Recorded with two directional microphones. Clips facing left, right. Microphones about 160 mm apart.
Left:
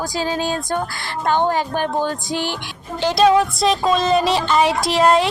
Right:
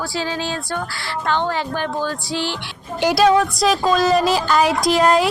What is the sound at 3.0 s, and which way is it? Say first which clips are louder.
A woman's voice: even; 10° right (ahead or behind).